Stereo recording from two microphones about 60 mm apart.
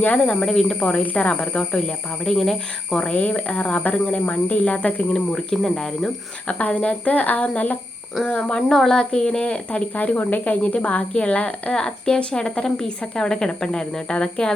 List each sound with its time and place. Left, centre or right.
0.3 s a woman's voice: centre
5.1 s a woman's voice: centre
6.5 s a woman's voice: left
8.7 s a woman's voice: centre